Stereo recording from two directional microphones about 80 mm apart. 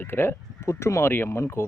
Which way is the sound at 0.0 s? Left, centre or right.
Left.